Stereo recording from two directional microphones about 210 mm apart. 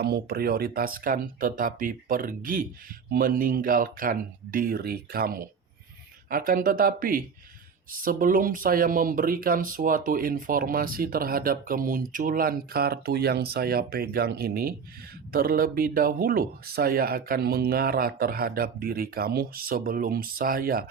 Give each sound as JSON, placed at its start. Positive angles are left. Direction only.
{"t": 0.0, "sound": "speech", "side_deg": -50}